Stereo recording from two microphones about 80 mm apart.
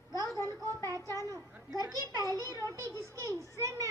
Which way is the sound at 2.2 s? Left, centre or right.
Left.